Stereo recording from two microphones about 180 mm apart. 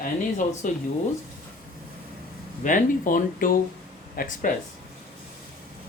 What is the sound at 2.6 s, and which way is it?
Speech, 50° left (ahead or behind).